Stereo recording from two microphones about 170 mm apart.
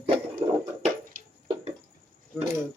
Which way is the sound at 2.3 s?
Centre (ahead or behind).